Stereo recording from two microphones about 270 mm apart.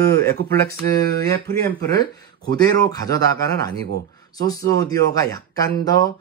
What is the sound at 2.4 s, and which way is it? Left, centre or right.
Speech, centre.